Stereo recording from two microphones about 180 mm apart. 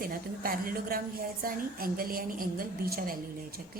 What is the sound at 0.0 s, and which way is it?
A woman's voice, 55° right (ahead or behind).